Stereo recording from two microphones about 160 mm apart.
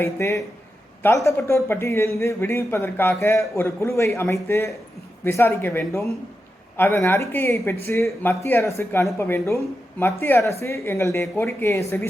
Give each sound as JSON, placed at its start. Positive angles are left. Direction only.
{"t": 0.0, "sound": "a man's voice", "side_deg": 20}